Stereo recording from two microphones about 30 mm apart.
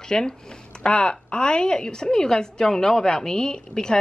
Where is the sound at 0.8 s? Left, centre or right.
Left.